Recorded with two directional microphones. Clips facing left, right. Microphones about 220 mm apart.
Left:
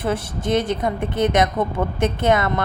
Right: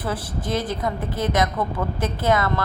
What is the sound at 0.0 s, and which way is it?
A woman's voice, 25° left (ahead or behind).